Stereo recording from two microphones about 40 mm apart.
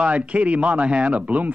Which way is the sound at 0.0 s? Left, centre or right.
Right.